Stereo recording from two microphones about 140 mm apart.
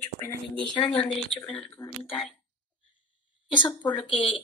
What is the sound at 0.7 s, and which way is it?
Speech, 40° left (ahead or behind).